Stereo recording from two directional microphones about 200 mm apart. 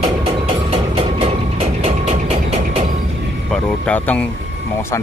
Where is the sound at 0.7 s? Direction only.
30° right (ahead or behind).